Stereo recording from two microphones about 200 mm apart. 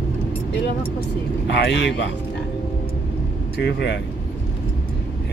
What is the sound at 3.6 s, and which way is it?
Speech, 60° left (ahead or behind).